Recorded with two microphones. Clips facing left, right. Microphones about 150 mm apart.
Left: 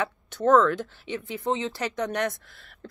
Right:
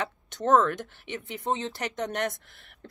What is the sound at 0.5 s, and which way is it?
Speech, 20° right (ahead or behind).